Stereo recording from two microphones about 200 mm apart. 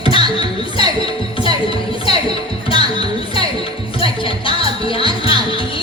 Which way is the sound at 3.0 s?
25° left (ahead or behind).